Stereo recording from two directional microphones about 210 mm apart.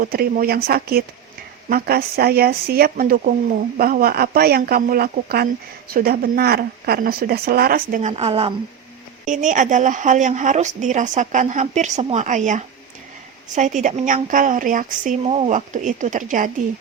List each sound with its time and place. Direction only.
0.0 s speech: 45° right (ahead or behind)
8.1 s a woman's voice: 25° right (ahead or behind)
9.2 s a woman's voice: 35° right (ahead or behind)